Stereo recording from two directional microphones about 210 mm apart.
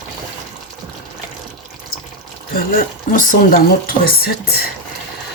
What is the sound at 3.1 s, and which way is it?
Speech, 40° left (ahead or behind).